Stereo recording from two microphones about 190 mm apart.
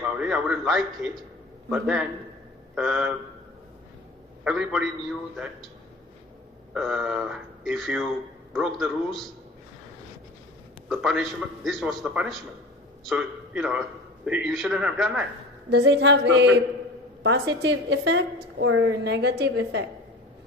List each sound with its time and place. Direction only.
0.0 s a man's voice: 5° right (ahead or behind)
4.4 s a man's voice: 5° right (ahead or behind)
6.7 s a man's voice: centre (ahead or behind)
10.8 s a man's voice: centre (ahead or behind)
15.7 s a woman's voice: 70° right (ahead or behind)
18.6 s a woman's voice: 80° right